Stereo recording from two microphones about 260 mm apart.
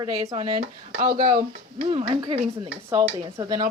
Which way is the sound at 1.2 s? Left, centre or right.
Right.